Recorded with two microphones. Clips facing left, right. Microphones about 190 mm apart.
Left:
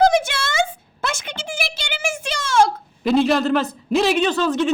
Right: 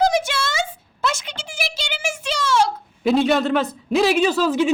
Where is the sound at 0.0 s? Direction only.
55° left (ahead or behind).